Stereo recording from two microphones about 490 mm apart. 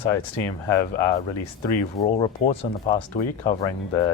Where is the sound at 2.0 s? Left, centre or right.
Centre.